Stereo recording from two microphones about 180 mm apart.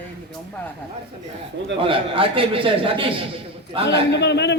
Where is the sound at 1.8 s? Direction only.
30° right (ahead or behind).